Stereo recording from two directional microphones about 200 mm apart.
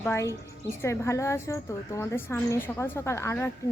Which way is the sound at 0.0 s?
15° left (ahead or behind).